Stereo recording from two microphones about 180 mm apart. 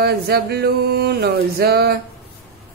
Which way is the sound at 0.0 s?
60° right (ahead or behind).